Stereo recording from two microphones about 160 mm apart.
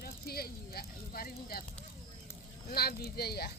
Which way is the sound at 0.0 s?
70° left (ahead or behind).